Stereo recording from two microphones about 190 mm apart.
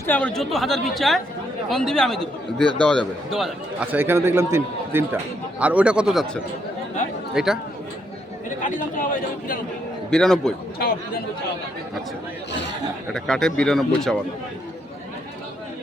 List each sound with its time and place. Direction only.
0.0 s speech: 10° left (ahead or behind)
10.1 s speech: 5° left (ahead or behind)
10.8 s speech: 50° left (ahead or behind)
13.1 s speech: 5° left (ahead or behind)